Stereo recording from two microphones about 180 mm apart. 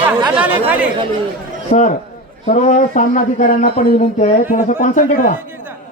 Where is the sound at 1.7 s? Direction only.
40° left (ahead or behind).